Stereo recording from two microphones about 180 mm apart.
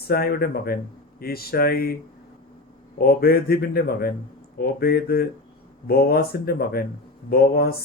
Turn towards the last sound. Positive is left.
turn(degrees=60)  # may be behind; listen again after turning